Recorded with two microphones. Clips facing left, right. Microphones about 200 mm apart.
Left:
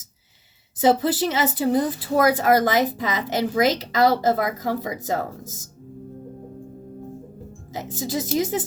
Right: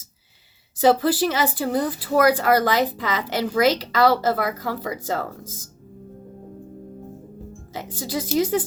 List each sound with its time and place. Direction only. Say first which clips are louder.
0.8 s a woman's voice: right 1 dB; 20° left (ahead or behind)
7.9 s a woman's voice: right 1 dB; 25° left (ahead or behind)